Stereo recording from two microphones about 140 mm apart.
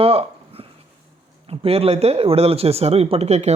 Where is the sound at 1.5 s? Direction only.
45° right (ahead or behind).